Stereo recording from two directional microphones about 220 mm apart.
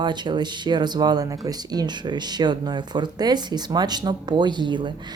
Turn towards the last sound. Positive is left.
turn(degrees=-20)  # may be behind; listen again after turning